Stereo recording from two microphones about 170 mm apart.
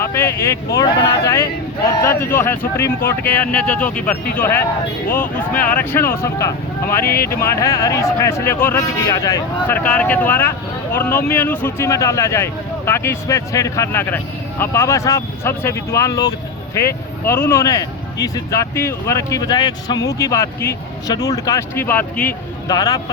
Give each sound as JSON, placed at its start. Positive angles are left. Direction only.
{"t": 0.0, "sound": "speech", "side_deg": 15}
{"t": 22.7, "sound": "speech", "side_deg": 20}